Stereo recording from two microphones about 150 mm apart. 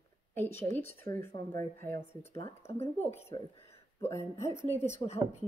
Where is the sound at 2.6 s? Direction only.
45° left (ahead or behind).